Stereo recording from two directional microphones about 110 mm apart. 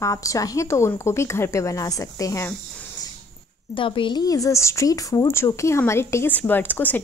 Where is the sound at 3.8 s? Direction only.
50° left (ahead or behind).